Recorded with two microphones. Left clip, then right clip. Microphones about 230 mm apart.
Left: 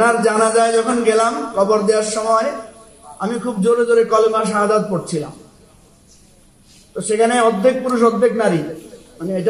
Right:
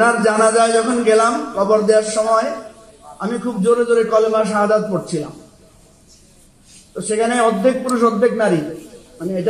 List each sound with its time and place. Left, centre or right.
0.0 s a sound: left
3.2 s a man's voice: left
7.0 s a man's voice: left